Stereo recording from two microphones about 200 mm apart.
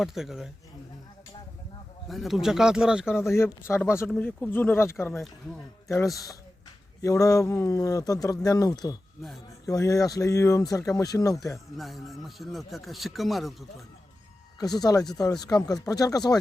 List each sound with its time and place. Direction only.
0.0 s speech: centre (ahead or behind)
2.0 s speech: centre (ahead or behind)
3.1 s speech: 10° left (ahead or behind)
7.0 s speech: 15° left (ahead or behind)
11.8 s speech: centre (ahead or behind)
14.8 s speech: 20° left (ahead or behind)